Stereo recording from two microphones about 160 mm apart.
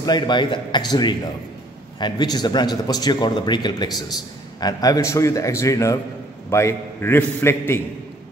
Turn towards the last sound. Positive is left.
turn(degrees=15)  # may be behind; listen again after turning